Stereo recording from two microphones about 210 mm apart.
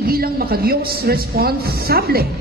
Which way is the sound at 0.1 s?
45° right (ahead or behind).